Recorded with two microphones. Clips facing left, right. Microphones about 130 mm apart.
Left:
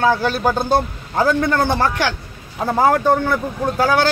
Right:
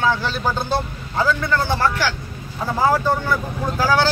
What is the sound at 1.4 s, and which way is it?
A man's voice, 50° left (ahead or behind).